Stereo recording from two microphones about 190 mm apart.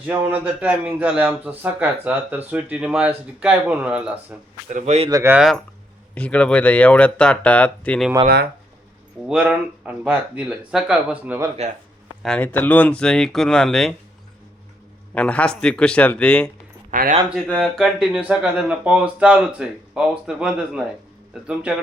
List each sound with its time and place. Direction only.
0.1 s a man's voice: 10° right (ahead or behind)
4.7 s speech: 35° right (ahead or behind)
5.0 s a man's voice: 15° right (ahead or behind)
6.1 s speech: 5° left (ahead or behind)
9.3 s speech: 5° right (ahead or behind)
12.2 s speech: 5° left (ahead or behind)
15.1 s speech: 5° left (ahead or behind)
16.9 s speech: 45° right (ahead or behind)
17.2 s speech: centre (ahead or behind)